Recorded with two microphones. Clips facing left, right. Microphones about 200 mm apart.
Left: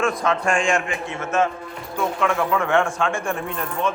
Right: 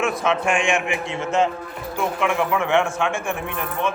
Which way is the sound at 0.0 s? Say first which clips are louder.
Even; 5° right (ahead or behind).